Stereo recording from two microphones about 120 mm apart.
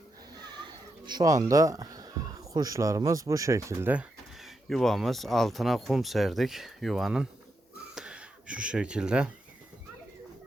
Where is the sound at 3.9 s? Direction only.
10° right (ahead or behind).